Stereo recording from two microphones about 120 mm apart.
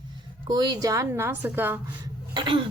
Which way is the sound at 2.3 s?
45° right (ahead or behind).